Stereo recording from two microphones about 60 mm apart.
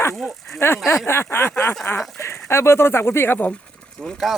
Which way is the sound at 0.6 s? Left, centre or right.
Left.